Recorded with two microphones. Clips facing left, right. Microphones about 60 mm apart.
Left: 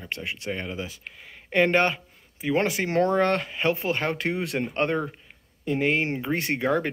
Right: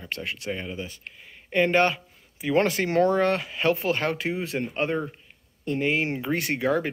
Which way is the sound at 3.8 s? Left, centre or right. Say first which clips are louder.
Right 1 dB; centre.